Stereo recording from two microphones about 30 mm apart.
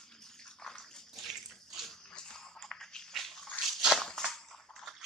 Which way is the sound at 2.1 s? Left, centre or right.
Left.